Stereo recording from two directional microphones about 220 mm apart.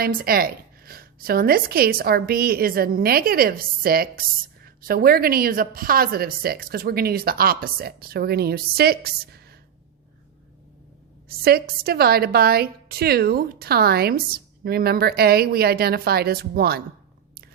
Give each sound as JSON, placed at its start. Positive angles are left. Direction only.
{"t": 0.0, "sound": "a woman's voice", "side_deg": -40}
{"t": 11.3, "sound": "a woman's voice", "side_deg": -45}